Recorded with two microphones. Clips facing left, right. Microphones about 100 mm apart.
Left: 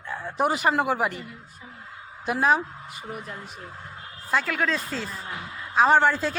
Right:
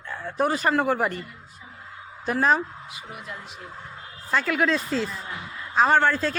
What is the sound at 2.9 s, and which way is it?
Speech, 45° left (ahead or behind).